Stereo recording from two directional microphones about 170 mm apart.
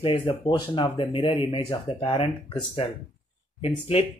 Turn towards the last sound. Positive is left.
turn(degrees=35)  # may be behind; listen again after turning